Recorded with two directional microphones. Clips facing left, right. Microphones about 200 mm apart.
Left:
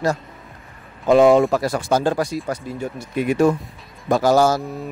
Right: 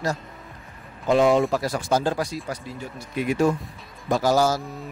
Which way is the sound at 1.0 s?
55° left (ahead or behind).